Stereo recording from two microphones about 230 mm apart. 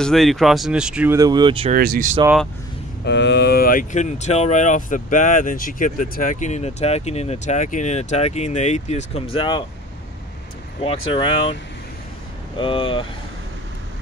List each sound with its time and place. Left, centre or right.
0.0 s speech: centre; by 1.7 s right
1.7 s speech: right
3.1 s speech: left
10.8 s speech: left
12.5 s speech: left